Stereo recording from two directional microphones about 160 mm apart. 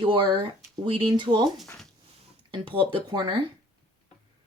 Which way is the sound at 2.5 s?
35° right (ahead or behind).